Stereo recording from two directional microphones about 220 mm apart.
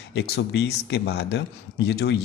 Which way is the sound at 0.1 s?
50° left (ahead or behind).